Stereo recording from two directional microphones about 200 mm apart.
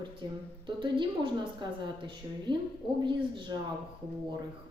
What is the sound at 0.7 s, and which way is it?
Speech, 25° right (ahead or behind).